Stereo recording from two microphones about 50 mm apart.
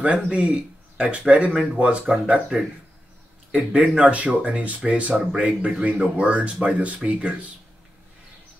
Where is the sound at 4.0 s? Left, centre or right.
Right.